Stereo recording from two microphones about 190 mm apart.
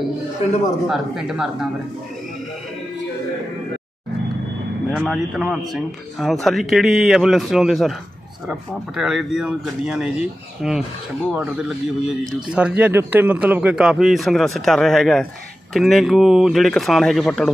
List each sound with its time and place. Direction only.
0.4 s speech: 30° left (ahead or behind)
0.8 s a man's voice: centre (ahead or behind)
4.9 s a man's voice: centre (ahead or behind)